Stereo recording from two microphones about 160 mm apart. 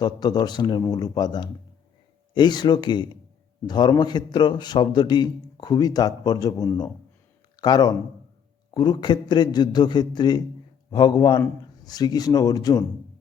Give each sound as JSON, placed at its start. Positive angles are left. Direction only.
{"t": 0.0, "sound": "a man's voice", "side_deg": 25}